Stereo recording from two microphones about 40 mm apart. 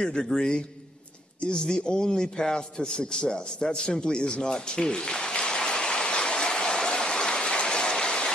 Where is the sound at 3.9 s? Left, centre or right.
Centre.